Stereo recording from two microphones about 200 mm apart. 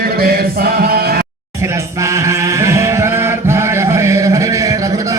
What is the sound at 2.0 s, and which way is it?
Chant, 15° right (ahead or behind).